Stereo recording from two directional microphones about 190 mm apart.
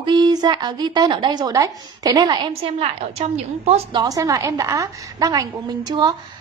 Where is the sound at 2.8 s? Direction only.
35° right (ahead or behind).